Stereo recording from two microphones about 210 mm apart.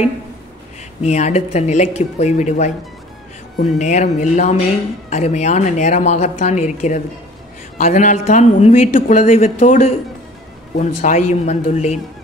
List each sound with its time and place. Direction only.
1.0 s speech: 35° left (ahead or behind)